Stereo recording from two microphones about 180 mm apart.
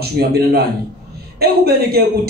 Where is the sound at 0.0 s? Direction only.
60° right (ahead or behind).